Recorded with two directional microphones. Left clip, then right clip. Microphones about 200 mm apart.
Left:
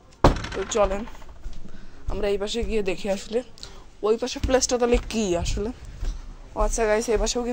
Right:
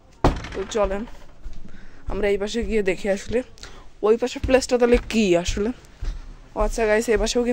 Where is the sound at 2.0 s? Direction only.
35° right (ahead or behind).